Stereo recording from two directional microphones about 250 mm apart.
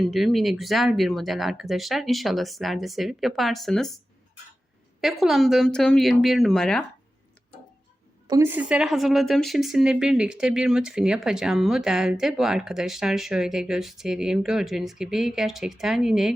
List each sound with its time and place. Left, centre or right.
0.0 s speech: centre
4.9 s speech: centre
8.3 s speech: centre